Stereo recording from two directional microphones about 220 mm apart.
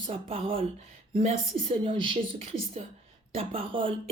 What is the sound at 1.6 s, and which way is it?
Speech, 25° right (ahead or behind).